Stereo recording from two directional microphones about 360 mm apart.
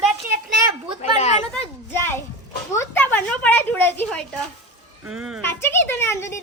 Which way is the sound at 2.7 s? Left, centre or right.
Centre.